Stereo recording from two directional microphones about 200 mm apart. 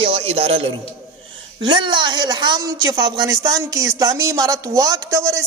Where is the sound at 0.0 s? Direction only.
30° right (ahead or behind).